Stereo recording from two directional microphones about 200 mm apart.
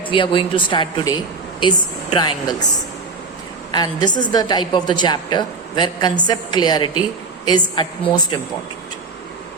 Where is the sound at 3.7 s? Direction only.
20° left (ahead or behind).